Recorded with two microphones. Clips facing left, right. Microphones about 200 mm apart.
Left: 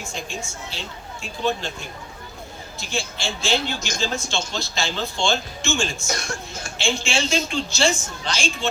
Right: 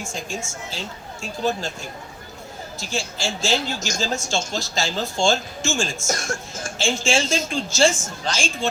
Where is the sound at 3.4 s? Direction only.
45° right (ahead or behind).